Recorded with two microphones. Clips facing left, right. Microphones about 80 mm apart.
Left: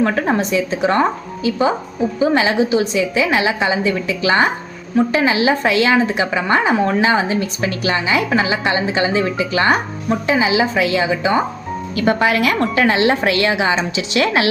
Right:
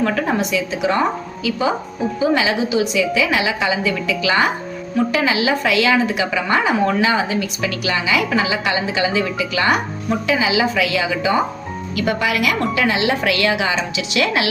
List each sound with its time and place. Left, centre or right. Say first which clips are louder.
0.0 s a woman's voice: left 2 dB; left